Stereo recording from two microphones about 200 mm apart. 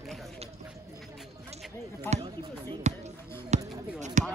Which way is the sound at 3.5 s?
35° right (ahead or behind).